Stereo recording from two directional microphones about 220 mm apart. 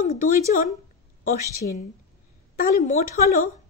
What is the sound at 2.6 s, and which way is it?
Speech, 35° left (ahead or behind).